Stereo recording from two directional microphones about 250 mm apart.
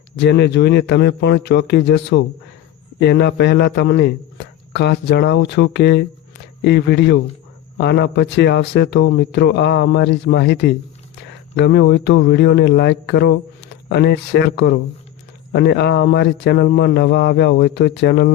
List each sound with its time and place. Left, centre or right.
0.2 s a man's voice: left